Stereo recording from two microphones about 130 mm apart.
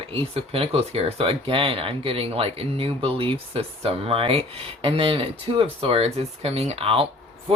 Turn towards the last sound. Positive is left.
turn(degrees=-45)  # may be behind; listen again after turning